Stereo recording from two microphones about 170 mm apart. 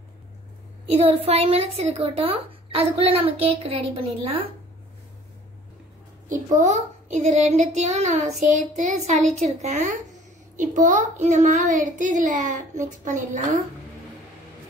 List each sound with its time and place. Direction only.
0.8 s speech: 35° right (ahead or behind)
6.2 s a child's voice: 45° right (ahead or behind)